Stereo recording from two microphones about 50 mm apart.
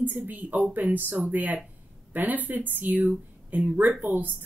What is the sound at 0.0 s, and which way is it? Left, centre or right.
Speech, right.